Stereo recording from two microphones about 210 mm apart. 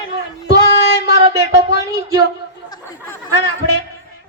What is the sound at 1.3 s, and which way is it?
Speech, 55° left (ahead or behind).